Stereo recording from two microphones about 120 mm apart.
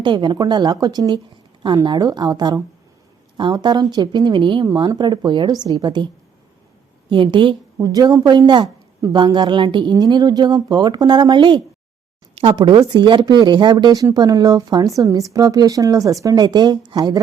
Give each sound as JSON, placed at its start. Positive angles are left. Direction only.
{"t": 0.0, "sound": "a woman's voice", "side_deg": -40}
{"t": 7.1, "sound": "a woman's voice", "side_deg": -40}